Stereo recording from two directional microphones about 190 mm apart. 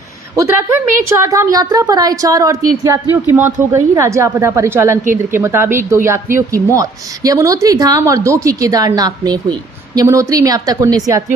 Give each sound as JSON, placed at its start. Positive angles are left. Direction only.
{"t": 0.3, "sound": "a woman's voice", "side_deg": -15}